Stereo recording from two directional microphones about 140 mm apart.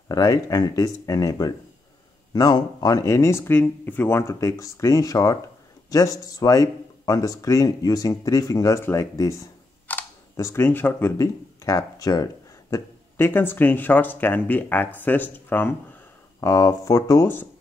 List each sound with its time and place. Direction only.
0.1 s speech: 25° left (ahead or behind)
9.9 s camera: 10° left (ahead or behind)
10.3 s speech: 20° left (ahead or behind)